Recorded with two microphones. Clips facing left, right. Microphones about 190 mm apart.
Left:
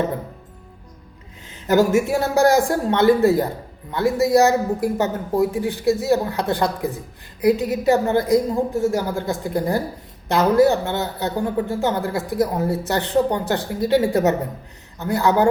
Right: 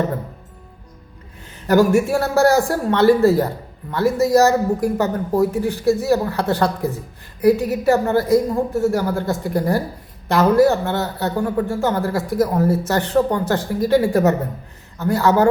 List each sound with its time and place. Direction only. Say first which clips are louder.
1.6 s speech: right 2 dB; 20° left (ahead or behind)